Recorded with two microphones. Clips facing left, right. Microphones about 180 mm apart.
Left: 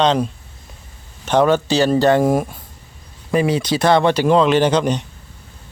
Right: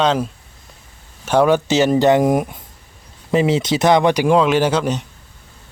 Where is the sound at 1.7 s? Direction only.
20° right (ahead or behind).